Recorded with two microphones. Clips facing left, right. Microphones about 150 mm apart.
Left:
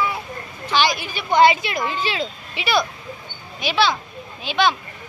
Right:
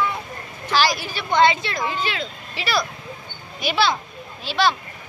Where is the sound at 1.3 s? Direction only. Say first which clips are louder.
Left 3 dB; 10° left (ahead or behind).